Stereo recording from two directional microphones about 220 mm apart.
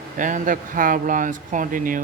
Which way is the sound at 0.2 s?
35° right (ahead or behind).